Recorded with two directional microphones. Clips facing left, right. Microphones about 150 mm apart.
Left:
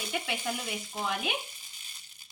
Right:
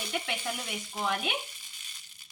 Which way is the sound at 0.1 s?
5° left (ahead or behind).